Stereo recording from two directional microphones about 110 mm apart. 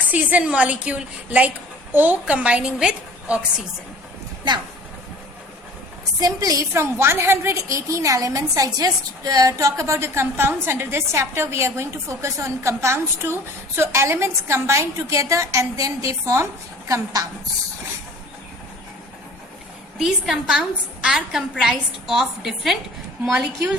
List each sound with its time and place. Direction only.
0.1 s a woman's voice: 15° right (ahead or behind)
6.1 s a woman's voice: 35° right (ahead or behind)
20.0 s a woman's voice: 5° right (ahead or behind)